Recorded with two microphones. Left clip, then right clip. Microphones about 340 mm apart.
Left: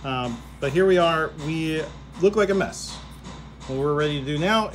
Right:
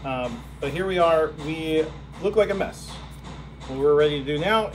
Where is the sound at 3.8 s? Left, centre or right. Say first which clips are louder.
Right 6 dB; left.